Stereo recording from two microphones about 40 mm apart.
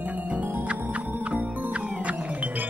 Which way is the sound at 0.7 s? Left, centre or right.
Right.